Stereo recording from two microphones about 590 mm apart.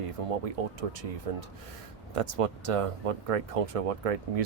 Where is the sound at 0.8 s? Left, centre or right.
Right.